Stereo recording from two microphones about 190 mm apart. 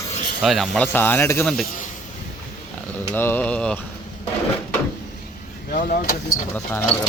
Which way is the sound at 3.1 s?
10° left (ahead or behind).